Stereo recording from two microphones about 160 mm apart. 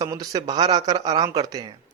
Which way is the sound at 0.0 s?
25° right (ahead or behind).